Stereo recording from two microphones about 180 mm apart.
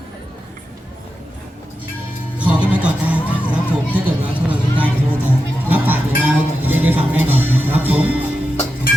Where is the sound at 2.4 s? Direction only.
10° right (ahead or behind).